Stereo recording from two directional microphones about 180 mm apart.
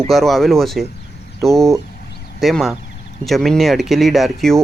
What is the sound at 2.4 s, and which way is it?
Speech, centre (ahead or behind).